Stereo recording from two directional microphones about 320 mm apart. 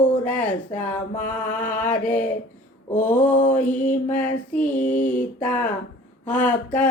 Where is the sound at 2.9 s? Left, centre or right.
Left.